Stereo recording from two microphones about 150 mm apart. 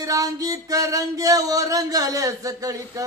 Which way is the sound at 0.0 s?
25° right (ahead or behind).